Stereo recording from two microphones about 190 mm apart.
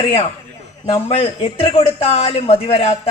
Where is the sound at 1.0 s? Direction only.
30° left (ahead or behind).